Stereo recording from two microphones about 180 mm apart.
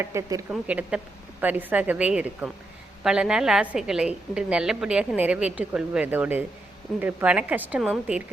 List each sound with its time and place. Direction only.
0.0 s a woman's voice: 15° right (ahead or behind)
0.5 s a woman's voice: 5° right (ahead or behind)